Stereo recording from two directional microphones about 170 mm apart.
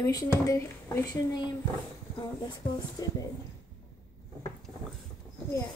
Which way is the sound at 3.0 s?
20° left (ahead or behind).